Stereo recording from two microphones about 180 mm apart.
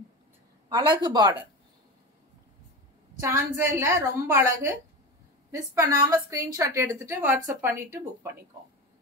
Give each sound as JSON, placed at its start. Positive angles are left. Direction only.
{"t": 0.7, "sound": "speech", "side_deg": -25}
{"t": 3.2, "sound": "a woman's voice", "side_deg": -15}
{"t": 6.0, "sound": "a woman's voice", "side_deg": -20}